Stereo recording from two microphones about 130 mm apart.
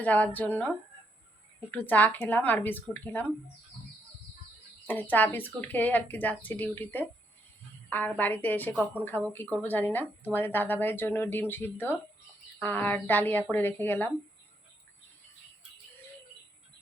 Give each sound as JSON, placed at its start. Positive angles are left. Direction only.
{"t": 0.0, "sound": "speech", "side_deg": 10}
{"t": 1.7, "sound": "speech", "side_deg": 15}
{"t": 4.9, "sound": "speech", "side_deg": 15}